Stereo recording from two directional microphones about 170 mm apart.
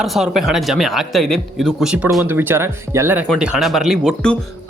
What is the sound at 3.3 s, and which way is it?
Speech, 5° right (ahead or behind).